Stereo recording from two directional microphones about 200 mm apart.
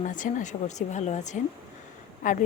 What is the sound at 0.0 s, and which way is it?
A woman's voice, 40° left (ahead or behind).